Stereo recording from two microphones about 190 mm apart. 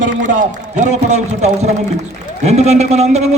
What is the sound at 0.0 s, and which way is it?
A man's voice, 40° right (ahead or behind).